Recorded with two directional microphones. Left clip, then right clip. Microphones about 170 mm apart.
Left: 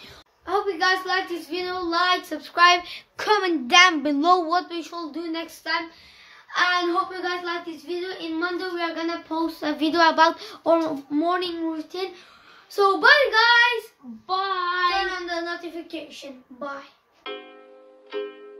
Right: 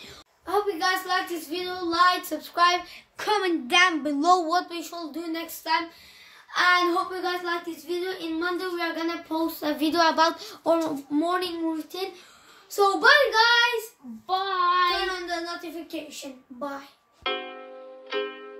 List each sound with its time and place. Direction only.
0.5 s a woman's voice: centre (ahead or behind)
3.2 s a woman's voice: 60° left (ahead or behind)
4.2 s a woman's voice: 5° right (ahead or behind)
12.7 s a child's voice: 10° left (ahead or behind)
14.2 s child singing: 20° right (ahead or behind)
15.0 s speech: centre (ahead or behind)
17.2 s music: centre (ahead or behind)